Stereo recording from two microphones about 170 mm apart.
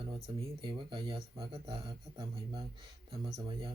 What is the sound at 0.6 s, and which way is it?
Speech, 25° right (ahead or behind).